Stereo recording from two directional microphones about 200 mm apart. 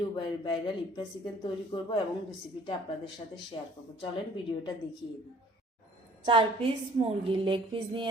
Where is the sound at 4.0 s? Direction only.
25° left (ahead or behind).